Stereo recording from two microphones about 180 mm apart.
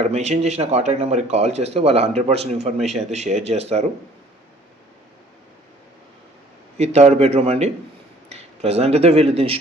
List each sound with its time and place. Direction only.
0.0 s speech: 40° right (ahead or behind)
6.7 s speech: 35° right (ahead or behind)